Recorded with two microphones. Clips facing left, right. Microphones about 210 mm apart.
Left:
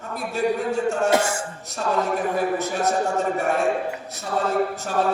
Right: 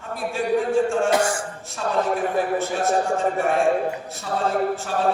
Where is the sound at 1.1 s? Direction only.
25° left (ahead or behind).